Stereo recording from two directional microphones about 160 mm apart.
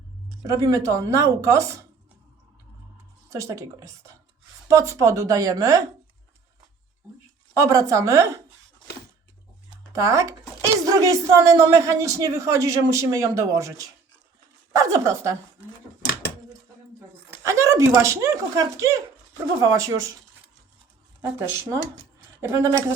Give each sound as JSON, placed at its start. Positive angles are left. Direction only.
{"t": 0.4, "sound": "speech", "side_deg": -20}
{"t": 3.2, "sound": "speech", "side_deg": -20}
{"t": 7.5, "sound": "speech", "side_deg": -20}
{"t": 9.9, "sound": "speech", "side_deg": -20}
{"t": 17.3, "sound": "speech", "side_deg": -15}
{"t": 21.2, "sound": "a woman's voice", "side_deg": -15}